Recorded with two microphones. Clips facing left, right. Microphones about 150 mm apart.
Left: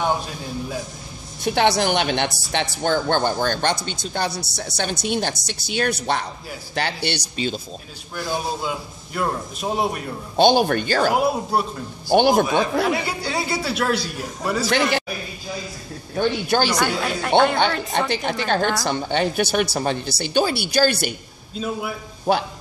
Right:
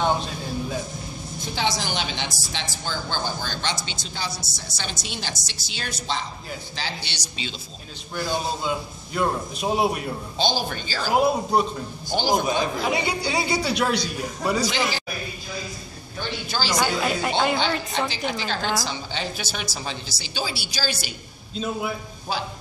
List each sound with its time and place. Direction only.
1.4 s a woman's voice: 65° left (ahead or behind)
8.2 s a man's voice: centre (ahead or behind)
10.3 s a woman's voice: 60° left (ahead or behind)
11.1 s a man's voice: 5° left (ahead or behind)
12.1 s a woman's voice: 60° left (ahead or behind)
12.8 s a man's voice: centre (ahead or behind)
16.2 s a woman's voice: 55° left (ahead or behind)
16.7 s a man's voice: 5° right (ahead or behind)
17.9 s a woman's voice: 55° left (ahead or behind)
21.5 s a man's voice: 5° left (ahead or behind)
22.3 s a woman's voice: 60° left (ahead or behind)